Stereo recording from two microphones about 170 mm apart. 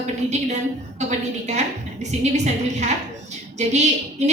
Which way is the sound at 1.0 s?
40° right (ahead or behind).